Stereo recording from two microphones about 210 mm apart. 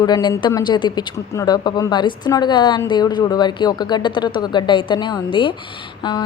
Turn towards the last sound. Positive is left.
turn(degrees=20)  # may be behind; listen again after turning